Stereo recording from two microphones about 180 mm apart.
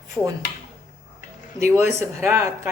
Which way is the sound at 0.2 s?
Centre (ahead or behind).